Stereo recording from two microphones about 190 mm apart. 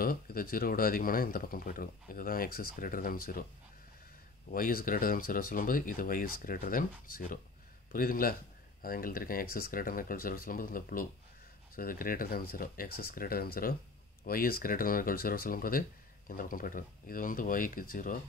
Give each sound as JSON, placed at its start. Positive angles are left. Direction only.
{"t": 0.0, "sound": "speech", "side_deg": 50}
{"t": 4.5, "sound": "speech", "side_deg": 50}